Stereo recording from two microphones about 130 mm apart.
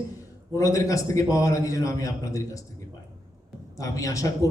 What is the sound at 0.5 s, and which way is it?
A man's voice, 25° left (ahead or behind).